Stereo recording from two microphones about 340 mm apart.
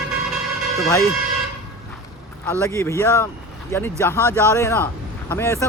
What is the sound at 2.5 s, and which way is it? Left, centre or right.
Speech, centre.